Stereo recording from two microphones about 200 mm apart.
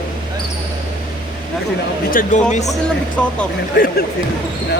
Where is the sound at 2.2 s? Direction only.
45° left (ahead or behind).